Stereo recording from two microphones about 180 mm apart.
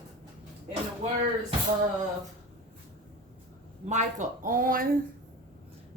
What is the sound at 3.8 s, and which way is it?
Speech, 40° right (ahead or behind).